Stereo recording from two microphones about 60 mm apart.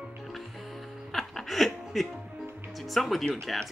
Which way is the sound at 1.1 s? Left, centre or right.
Centre.